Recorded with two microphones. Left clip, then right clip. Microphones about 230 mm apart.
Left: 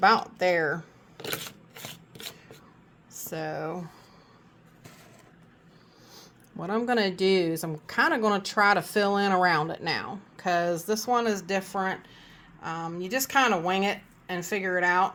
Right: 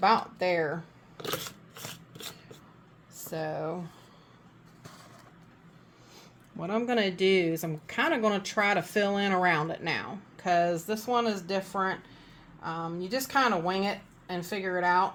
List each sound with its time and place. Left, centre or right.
0.0 s speech: left
3.2 s speech: left
6.6 s speech: left